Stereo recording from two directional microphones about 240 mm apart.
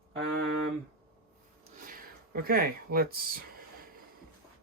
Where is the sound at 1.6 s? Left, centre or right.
Right.